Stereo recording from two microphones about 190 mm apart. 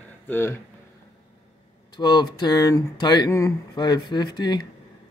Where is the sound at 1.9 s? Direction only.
20° left (ahead or behind).